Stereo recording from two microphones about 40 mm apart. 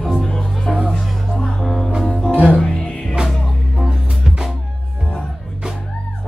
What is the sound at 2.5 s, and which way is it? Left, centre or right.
Music, left.